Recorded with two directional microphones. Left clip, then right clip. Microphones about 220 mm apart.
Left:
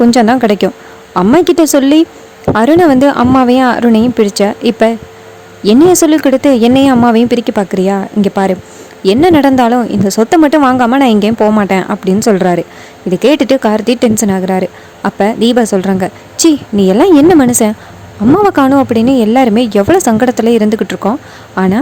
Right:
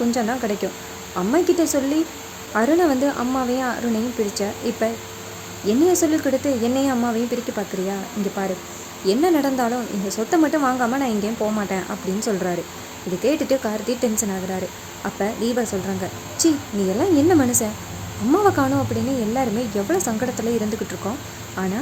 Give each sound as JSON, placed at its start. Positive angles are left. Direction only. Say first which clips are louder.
{"t": 0.1, "sound": "speech", "louder": "left 14 dB", "side_deg": 40}
{"t": 9.0, "sound": "speech", "louder": "left 12 dB", "side_deg": 40}